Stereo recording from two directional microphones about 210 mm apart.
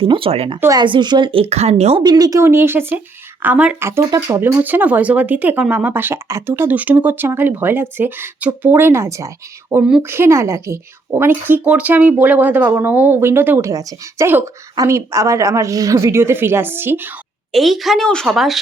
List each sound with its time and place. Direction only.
0.0 s a woman's voice: 25° right (ahead or behind); by 18.6 s centre (ahead or behind)